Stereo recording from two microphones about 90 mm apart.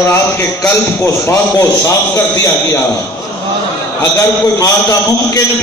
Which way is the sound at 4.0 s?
35° left (ahead or behind).